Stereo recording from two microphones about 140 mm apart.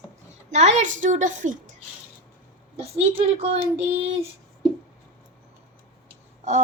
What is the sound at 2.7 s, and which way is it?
A woman's voice, 50° right (ahead or behind).